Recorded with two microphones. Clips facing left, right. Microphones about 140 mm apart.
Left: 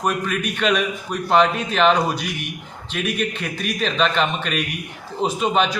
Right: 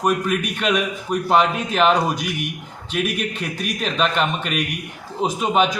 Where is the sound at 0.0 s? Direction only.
5° right (ahead or behind).